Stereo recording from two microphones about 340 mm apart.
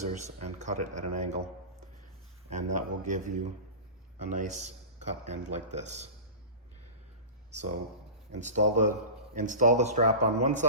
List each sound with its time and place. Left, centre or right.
0.0 s a man's voice: centre
2.7 s a man's voice: right
7.5 s a man's voice: centre